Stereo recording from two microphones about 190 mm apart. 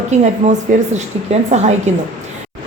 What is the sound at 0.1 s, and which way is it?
A woman's voice, 40° right (ahead or behind).